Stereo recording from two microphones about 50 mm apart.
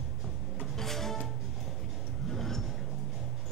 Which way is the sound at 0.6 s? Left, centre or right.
Centre.